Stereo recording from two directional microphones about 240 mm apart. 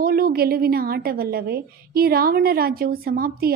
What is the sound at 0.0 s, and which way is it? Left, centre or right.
A woman's voice, right.